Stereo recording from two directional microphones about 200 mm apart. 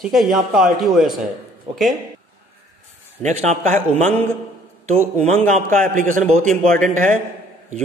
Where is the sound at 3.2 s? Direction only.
35° right (ahead or behind).